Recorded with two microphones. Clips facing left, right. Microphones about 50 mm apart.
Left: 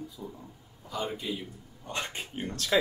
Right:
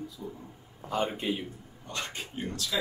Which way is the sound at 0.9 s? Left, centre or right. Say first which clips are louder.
Right 4 dB; right.